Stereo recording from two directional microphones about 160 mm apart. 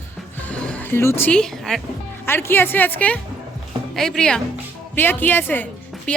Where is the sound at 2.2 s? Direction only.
15° left (ahead or behind).